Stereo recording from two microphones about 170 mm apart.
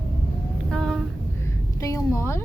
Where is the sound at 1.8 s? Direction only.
20° left (ahead or behind).